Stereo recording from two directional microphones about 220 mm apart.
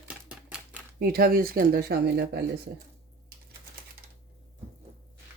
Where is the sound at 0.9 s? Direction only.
45° right (ahead or behind).